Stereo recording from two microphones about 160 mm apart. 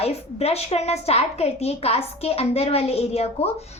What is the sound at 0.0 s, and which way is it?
A woman's voice, 40° left (ahead or behind).